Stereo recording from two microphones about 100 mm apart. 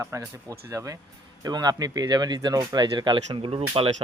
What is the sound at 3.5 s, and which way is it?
Speech, 70° right (ahead or behind).